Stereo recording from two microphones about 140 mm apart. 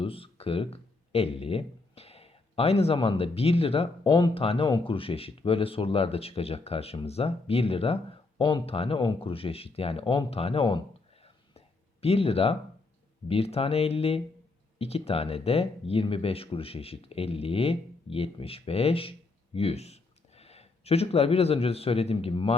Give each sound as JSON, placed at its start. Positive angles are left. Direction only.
{"t": 0.0, "sound": "speech", "side_deg": 40}